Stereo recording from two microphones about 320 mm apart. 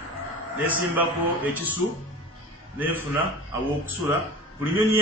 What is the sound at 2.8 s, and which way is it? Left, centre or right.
Speech, centre.